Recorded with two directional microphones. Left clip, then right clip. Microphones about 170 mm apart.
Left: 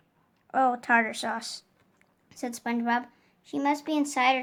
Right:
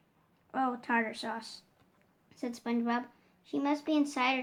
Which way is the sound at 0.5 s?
45° left (ahead or behind).